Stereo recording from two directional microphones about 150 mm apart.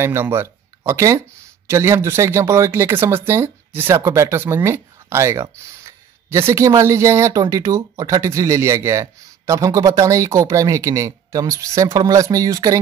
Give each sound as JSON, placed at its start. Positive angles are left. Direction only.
{"t": 0.0, "sound": "speech", "side_deg": -15}